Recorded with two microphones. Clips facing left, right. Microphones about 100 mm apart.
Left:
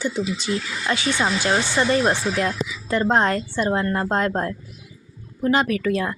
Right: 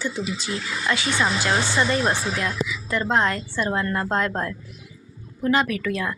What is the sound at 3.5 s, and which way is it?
Speech, 25° left (ahead or behind).